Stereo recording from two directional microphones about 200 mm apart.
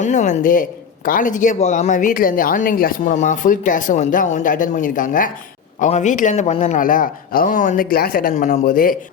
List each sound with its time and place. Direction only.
0.0 s speech: 35° left (ahead or behind)